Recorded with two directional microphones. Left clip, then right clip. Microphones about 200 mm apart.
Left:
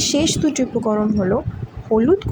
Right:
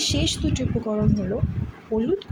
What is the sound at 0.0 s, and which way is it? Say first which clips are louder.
A woman's voice: left 6 dB; 30° left (ahead or behind).